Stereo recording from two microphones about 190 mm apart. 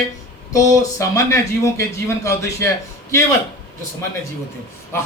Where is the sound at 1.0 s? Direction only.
15° left (ahead or behind).